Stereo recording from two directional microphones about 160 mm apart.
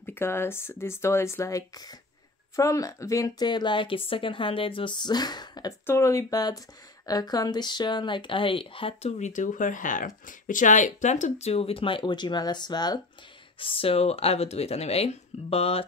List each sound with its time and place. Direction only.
0.0 s a woman's voice: 15° left (ahead or behind); by 15.8 s 40° left (ahead or behind)